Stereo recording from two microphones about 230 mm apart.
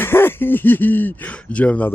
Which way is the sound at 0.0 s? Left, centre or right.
Centre.